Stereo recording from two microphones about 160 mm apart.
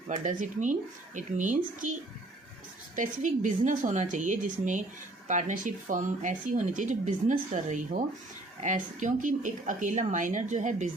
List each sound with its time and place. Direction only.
0.1 s speech: 50° right (ahead or behind)